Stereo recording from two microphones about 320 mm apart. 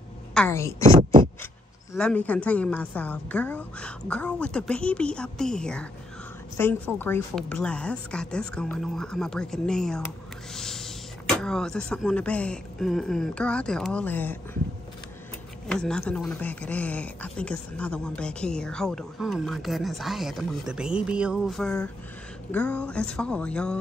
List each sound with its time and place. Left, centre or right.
0.3 s a woman's voice: centre
0.8 s speech: centre
2.0 s a woman's voice: centre
15.7 s a woman's voice: centre